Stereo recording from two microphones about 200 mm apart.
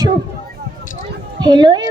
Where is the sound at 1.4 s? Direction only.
20° right (ahead or behind).